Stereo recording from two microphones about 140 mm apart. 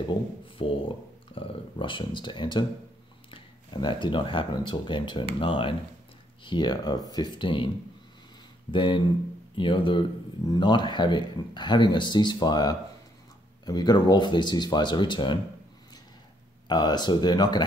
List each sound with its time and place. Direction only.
0.6 s speech: 40° left (ahead or behind)
8.7 s speech: 35° left (ahead or behind)
16.6 s speech: 30° left (ahead or behind)